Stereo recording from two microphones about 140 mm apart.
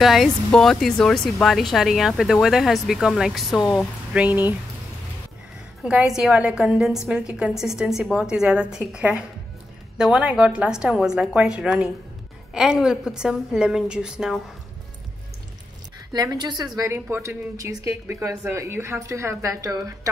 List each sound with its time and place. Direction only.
0.0 s speech: centre (ahead or behind)
5.9 s speech: 5° right (ahead or behind)
16.1 s a woman's voice: 30° right (ahead or behind)
16.7 s a woman's voice: 20° right (ahead or behind)